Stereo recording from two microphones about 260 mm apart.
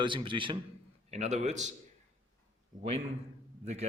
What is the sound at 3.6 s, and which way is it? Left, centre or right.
Speech, right.